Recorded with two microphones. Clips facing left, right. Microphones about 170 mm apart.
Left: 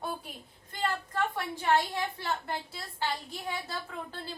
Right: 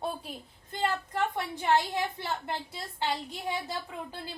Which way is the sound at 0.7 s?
25° right (ahead or behind).